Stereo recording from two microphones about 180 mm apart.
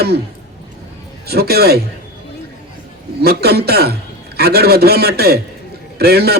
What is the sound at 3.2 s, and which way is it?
Speech, 60° right (ahead or behind).